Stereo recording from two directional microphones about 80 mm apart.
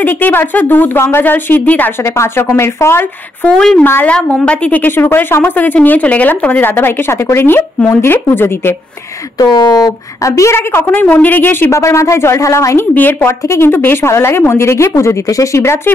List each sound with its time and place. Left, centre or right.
0.0 s a woman's voice: left
3.4 s speech: centre
3.8 s a woman's voice: left
4.1 s a woman's voice: centre
9.5 s a woman's voice: left
11.7 s a woman's voice: left
12.7 s a woman's voice: left
13.4 s a woman's voice: left
13.7 s a woman's voice: left